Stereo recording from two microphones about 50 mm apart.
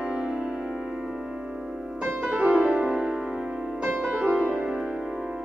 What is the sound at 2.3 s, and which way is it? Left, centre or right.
Music, right.